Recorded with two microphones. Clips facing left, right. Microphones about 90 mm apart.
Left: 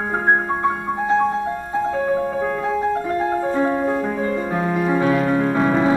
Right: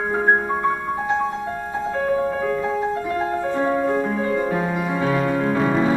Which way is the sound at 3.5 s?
40° left (ahead or behind).